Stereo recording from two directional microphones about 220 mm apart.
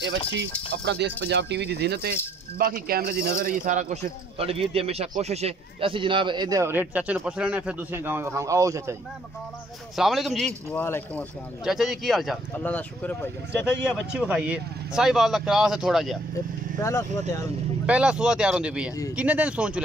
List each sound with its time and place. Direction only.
0.0 s speech: 50° right (ahead or behind); by 8.9 s 15° right (ahead or behind)
9.9 s speech: centre (ahead or behind)
11.6 s speech: centre (ahead or behind)
14.1 s speech: 5° right (ahead or behind)
16.7 s speech: 10° left (ahead or behind)
17.8 s speech: 5° right (ahead or behind)